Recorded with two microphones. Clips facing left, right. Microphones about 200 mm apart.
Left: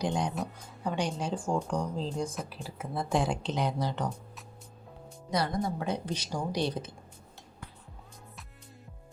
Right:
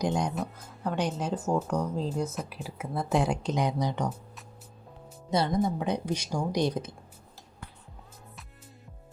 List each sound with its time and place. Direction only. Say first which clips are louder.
0.0 s speech: right 2 dB; 10° right (ahead or behind)
5.3 s speech: right 3 dB; 25° right (ahead or behind)
5.8 s speech: right 3 dB; 15° right (ahead or behind)